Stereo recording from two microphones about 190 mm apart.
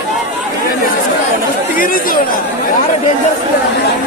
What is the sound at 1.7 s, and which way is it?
Speech, 50° left (ahead or behind).